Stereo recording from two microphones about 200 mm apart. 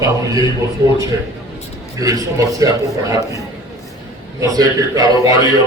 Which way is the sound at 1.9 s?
15° right (ahead or behind).